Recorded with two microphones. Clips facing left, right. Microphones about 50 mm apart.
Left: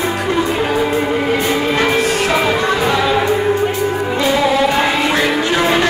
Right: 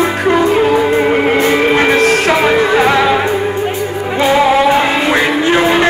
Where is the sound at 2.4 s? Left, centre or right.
Right.